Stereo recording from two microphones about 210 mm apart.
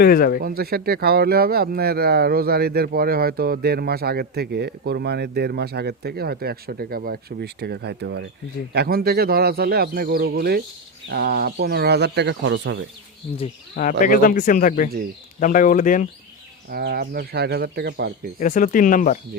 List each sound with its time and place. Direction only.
0.0 s speech: 45° left (ahead or behind)
0.4 s speech: 45° right (ahead or behind)
14.0 s speech: 40° left (ahead or behind)
16.7 s speech: 45° right (ahead or behind)
18.3 s speech: 40° left (ahead or behind)